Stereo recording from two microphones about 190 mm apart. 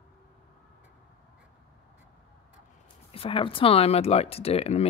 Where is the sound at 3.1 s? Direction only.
30° left (ahead or behind).